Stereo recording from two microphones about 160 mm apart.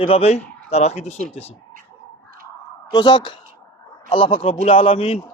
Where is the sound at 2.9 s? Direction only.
30° left (ahead or behind).